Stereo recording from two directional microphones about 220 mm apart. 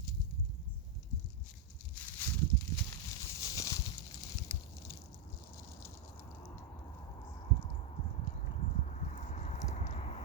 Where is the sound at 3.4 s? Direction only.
15° left (ahead or behind).